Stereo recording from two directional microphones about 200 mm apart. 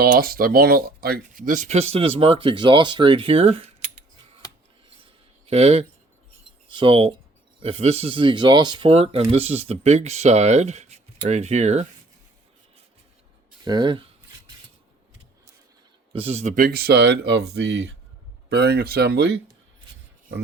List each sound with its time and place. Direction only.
0.0 s speech: 45° right (ahead or behind)
5.5 s speech: 30° right (ahead or behind)
13.7 s speech: 20° right (ahead or behind)
16.1 s speech: 30° right (ahead or behind); by 19.4 s 55° right (ahead or behind)